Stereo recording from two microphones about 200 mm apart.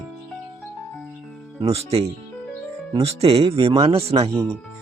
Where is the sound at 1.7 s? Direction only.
30° right (ahead or behind).